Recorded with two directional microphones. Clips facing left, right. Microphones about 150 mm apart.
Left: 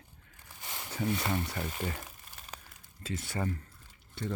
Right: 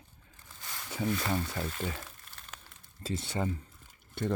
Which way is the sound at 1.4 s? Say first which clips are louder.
Right 1 dB; 15° left (ahead or behind).